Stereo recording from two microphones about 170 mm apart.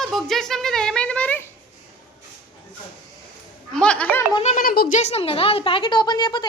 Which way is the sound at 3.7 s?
5° left (ahead or behind).